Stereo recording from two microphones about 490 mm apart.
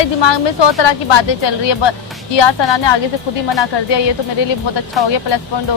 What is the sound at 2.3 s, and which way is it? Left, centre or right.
Speech, left.